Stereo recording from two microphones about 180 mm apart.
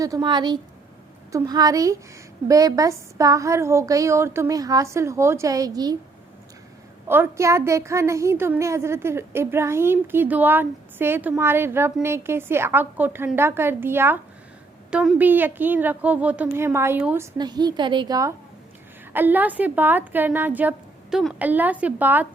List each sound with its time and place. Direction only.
0.0 s a woman's voice: 20° right (ahead or behind)
7.1 s a woman's voice: 15° right (ahead or behind)
17.3 s a woman's voice: 25° right (ahead or behind)